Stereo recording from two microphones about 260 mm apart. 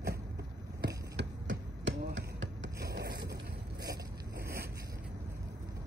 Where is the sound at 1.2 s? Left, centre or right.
Right.